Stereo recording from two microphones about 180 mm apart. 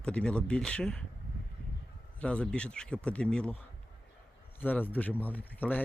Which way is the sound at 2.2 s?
5° left (ahead or behind).